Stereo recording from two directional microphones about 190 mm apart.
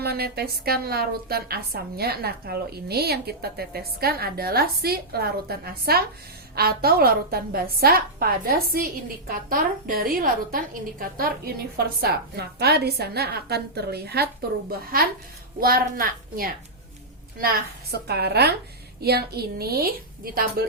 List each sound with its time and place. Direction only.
0.0 s a woman's voice: 55° right (ahead or behind)
18.1 s a woman's voice: 60° right (ahead or behind)